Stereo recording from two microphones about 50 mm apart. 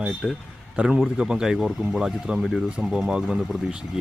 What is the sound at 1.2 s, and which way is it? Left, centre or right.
Speech, centre.